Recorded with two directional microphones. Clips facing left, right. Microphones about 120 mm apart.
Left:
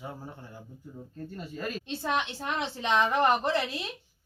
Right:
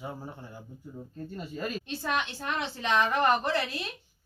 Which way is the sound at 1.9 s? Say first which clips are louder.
Left 3 dB; 25° left (ahead or behind).